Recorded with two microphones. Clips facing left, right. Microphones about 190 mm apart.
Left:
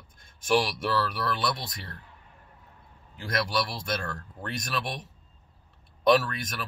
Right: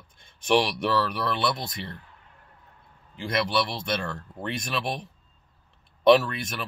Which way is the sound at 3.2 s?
Centre (ahead or behind).